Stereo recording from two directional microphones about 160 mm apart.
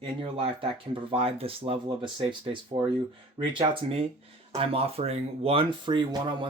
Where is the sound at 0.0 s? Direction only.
35° right (ahead or behind).